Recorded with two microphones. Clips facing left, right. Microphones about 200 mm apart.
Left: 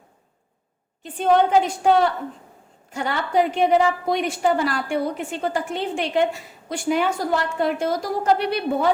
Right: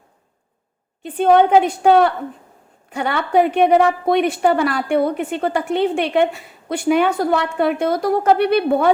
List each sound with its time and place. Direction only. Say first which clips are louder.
1.0 s a woman's voice: right 5 dB; 60° right (ahead or behind)